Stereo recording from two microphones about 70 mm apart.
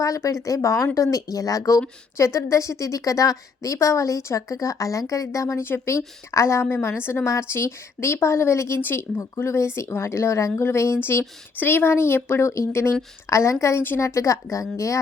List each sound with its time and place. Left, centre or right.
0.0 s a woman's voice: left
8.8 s speech: left
9.3 s a woman's voice: left